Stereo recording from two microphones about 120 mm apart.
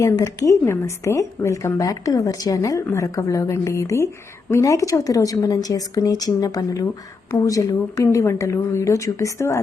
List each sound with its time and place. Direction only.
0.0 s a woman's voice: 30° left (ahead or behind)